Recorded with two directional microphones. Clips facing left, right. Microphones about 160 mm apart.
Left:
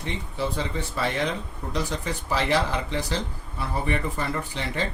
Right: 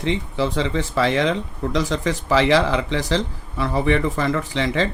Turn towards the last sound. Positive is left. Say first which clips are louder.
# right 8 dB
turn(degrees=-90)